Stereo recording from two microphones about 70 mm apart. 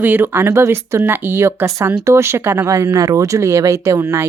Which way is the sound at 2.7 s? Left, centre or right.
Right.